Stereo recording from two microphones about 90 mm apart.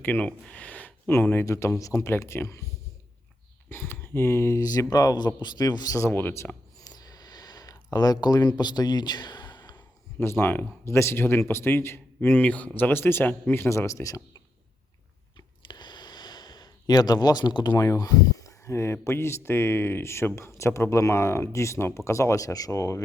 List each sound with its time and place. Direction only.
0.0 s speech: 20° left (ahead or behind)
3.7 s speech: 25° left (ahead or behind)
4.6 s a man's voice: 45° left (ahead or behind)
6.0 s speech: 25° left (ahead or behind)
6.8 s a sound: 45° left (ahead or behind)
10.2 s speech: 25° left (ahead or behind)
15.4 s a sound: 60° left (ahead or behind)
17.7 s speech: 40° left (ahead or behind)